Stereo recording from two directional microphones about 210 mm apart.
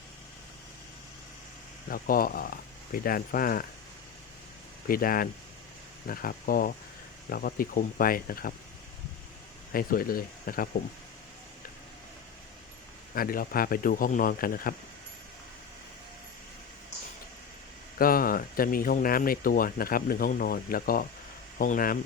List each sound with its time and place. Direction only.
1.9 s speech: 45° left (ahead or behind)
4.9 s speech: 45° left (ahead or behind)
9.7 s speech: 45° left (ahead or behind)
13.1 s speech: 45° left (ahead or behind)
17.9 s speech: 45° left (ahead or behind)